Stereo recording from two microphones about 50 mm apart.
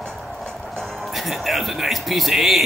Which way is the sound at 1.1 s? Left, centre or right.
Centre.